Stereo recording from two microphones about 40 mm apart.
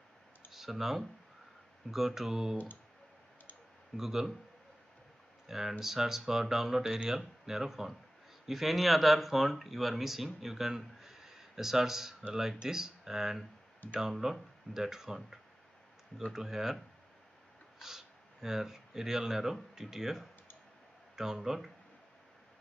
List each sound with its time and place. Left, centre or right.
0.5 s speech: centre
2.5 s speech: left
3.9 s speech: centre
5.5 s speech: centre
11.0 s a sound: centre
12.6 s speech: centre
16.3 s speech: centre
17.7 s speech: centre